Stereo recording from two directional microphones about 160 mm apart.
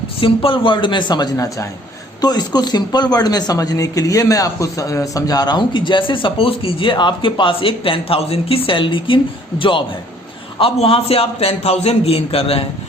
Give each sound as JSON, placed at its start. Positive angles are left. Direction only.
{"t": 0.2, "sound": "a man's voice", "side_deg": 35}